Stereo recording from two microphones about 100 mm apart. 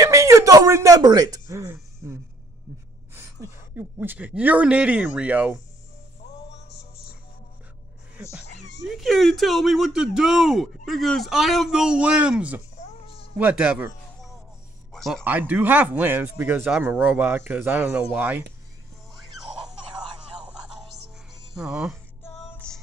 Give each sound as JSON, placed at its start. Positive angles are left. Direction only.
{"t": 0.0, "sound": "a sound", "side_deg": -30}
{"t": 3.7, "sound": "speech", "side_deg": -20}
{"t": 8.8, "sound": "speech", "side_deg": 0}
{"t": 13.0, "sound": "cat", "side_deg": 75}
{"t": 13.4, "sound": "speech", "side_deg": -15}
{"t": 14.9, "sound": "speech", "side_deg": 5}
{"t": 15.2, "sound": "speech", "side_deg": -15}
{"t": 16.8, "sound": "speech", "side_deg": -10}
{"t": 19.6, "sound": "a sound", "side_deg": -10}
{"t": 21.5, "sound": "speech", "side_deg": -5}
{"t": 22.5, "sound": "music", "side_deg": 10}